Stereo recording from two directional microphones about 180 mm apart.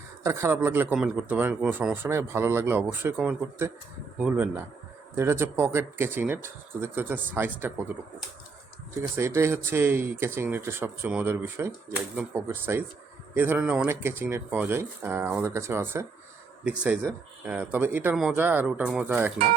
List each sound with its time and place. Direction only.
0.3 s speech: 15° right (ahead or behind)
9.0 s speech: 15° right (ahead or behind)